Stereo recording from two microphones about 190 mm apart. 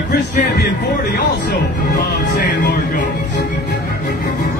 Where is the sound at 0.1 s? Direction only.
45° left (ahead or behind).